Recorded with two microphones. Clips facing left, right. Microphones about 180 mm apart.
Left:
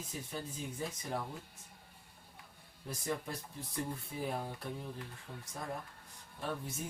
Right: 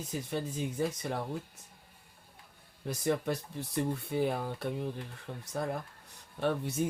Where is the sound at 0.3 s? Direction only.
75° right (ahead or behind).